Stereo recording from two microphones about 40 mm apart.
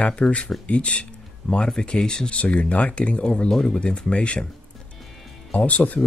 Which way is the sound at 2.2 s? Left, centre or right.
Left.